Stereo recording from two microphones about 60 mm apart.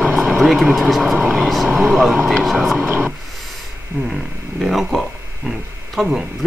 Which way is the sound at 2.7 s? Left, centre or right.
Right.